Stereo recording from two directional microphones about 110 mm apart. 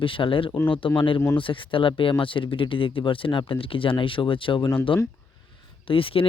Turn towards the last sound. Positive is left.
turn(degrees=55)  # may be behind; listen again after turning